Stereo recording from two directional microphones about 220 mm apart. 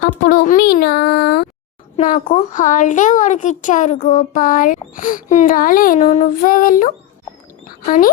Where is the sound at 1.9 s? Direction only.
30° left (ahead or behind).